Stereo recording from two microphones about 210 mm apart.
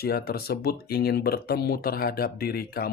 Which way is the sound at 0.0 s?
45° left (ahead or behind).